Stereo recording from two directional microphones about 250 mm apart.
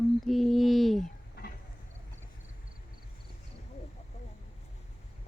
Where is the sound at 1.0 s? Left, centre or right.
Left.